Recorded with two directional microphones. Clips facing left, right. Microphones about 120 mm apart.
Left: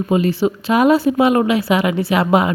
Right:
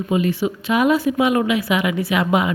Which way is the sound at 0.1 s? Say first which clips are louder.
Left 3 dB; 30° left (ahead or behind).